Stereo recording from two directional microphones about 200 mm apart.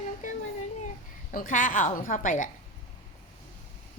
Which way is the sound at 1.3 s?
40° left (ahead or behind).